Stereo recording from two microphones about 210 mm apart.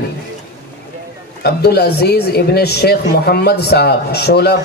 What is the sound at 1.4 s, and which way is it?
A man's voice, 50° left (ahead or behind).